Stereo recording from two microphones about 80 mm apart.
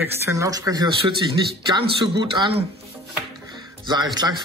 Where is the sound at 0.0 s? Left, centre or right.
Right.